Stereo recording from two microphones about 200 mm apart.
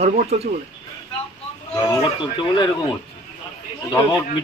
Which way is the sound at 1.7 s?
15° left (ahead or behind).